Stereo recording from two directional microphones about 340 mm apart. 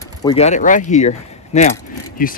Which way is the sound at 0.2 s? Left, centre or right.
Centre.